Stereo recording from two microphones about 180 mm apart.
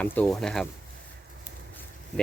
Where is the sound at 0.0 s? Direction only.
10° left (ahead or behind).